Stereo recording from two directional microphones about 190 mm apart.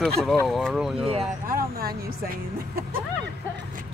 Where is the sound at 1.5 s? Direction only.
50° right (ahead or behind).